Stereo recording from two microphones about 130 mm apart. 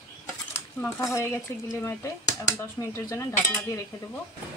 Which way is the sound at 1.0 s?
25° left (ahead or behind).